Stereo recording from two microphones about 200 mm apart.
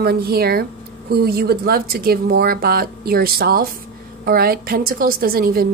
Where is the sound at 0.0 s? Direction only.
50° right (ahead or behind).